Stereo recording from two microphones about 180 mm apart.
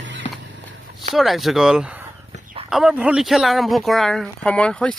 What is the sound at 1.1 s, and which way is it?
Speech, centre (ahead or behind).